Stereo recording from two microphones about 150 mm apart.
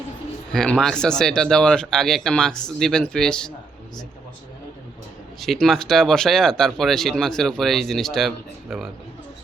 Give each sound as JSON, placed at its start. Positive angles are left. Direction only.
{"t": 0.5, "sound": "speech", "side_deg": 5}
{"t": 5.4, "sound": "speech", "side_deg": 0}